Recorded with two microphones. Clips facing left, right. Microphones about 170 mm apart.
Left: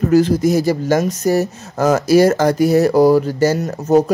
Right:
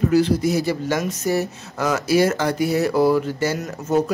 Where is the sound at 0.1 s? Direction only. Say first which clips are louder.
Left 8 dB; 45° left (ahead or behind).